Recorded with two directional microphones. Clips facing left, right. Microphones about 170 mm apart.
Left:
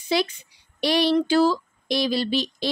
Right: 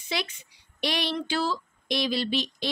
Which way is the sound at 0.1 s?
35° left (ahead or behind).